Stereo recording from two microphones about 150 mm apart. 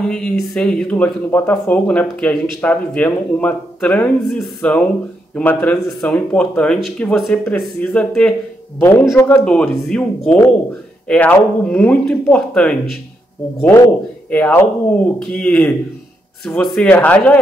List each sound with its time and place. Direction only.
0.0 s speech: 5° left (ahead or behind)
9.1 s speech: 20° left (ahead or behind)
9.4 s speech: 5° left (ahead or behind)
14.3 s speech: 10° left (ahead or behind)